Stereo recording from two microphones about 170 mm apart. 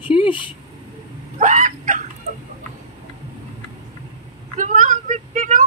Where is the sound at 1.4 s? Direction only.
50° right (ahead or behind).